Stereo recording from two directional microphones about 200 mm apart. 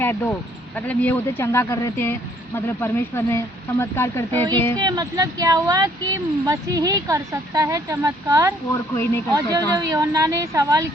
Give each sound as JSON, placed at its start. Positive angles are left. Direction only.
{"t": 0.0, "sound": "speech", "side_deg": 10}
{"t": 4.8, "sound": "speech", "side_deg": -20}
{"t": 8.7, "sound": "speech", "side_deg": 15}
{"t": 9.3, "sound": "speech", "side_deg": -20}